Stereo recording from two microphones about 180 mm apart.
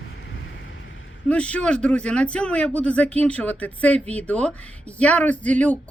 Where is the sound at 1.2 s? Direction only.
5° left (ahead or behind).